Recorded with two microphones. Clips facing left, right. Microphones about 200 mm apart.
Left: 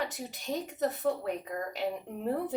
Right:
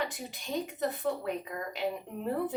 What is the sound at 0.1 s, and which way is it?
A woman's voice, 40° left (ahead or behind).